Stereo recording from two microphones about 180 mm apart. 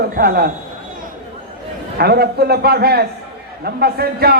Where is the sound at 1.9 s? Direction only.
60° right (ahead or behind).